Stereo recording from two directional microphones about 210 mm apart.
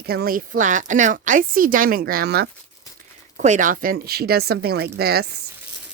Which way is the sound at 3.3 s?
35° right (ahead or behind).